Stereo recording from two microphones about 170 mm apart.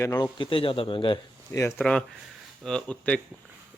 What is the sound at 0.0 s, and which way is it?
Speech, 25° left (ahead or behind).